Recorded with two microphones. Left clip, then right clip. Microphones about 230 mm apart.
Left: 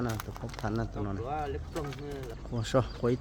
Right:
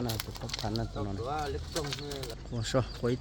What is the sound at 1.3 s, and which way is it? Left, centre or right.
Speech, left.